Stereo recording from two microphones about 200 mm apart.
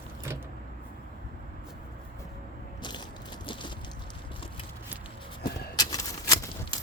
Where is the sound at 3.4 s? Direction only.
25° left (ahead or behind).